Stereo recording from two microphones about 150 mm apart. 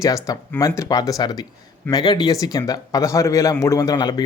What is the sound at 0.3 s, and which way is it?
Speech, 25° left (ahead or behind).